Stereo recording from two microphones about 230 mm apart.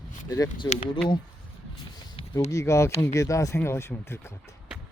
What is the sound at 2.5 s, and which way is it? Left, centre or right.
Speech, centre.